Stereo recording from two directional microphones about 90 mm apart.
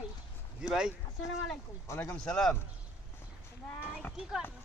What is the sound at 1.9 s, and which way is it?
Speech, 30° left (ahead or behind).